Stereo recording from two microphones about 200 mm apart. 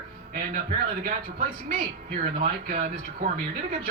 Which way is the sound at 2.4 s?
40° right (ahead or behind).